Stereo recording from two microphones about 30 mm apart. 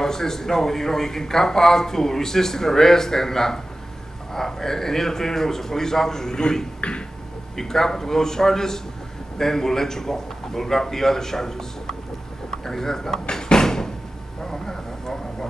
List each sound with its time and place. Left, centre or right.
0.0 s speech: centre
6.8 s a sound: left
7.5 s speech: centre
12.4 s door: centre
14.4 s vehicle: centre